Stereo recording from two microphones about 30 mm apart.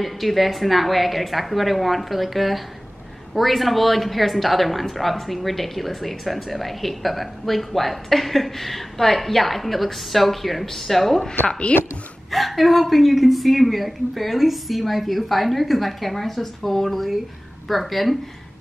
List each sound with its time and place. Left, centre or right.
0.0 s speech: centre
11.7 s a woman's voice: left
12.3 s speech: centre